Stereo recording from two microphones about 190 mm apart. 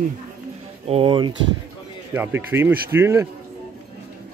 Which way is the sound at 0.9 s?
25° right (ahead or behind).